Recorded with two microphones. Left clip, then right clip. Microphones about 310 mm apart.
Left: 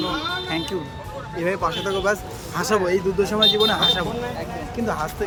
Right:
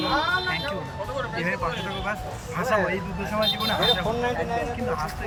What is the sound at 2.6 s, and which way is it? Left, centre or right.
Speech, centre.